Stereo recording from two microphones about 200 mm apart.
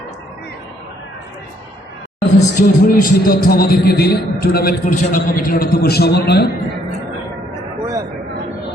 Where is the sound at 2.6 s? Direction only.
45° left (ahead or behind).